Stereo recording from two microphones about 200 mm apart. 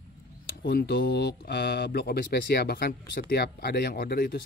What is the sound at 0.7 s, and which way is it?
Speech, 50° left (ahead or behind).